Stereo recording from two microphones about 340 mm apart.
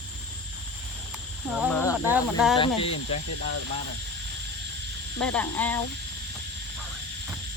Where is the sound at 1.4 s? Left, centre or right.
Centre.